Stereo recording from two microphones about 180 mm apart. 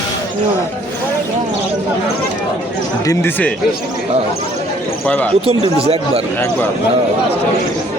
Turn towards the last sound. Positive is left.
turn(degrees=-35)  # may be behind; listen again after turning